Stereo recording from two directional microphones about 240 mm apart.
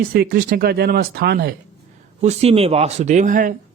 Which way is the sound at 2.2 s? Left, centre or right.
Right.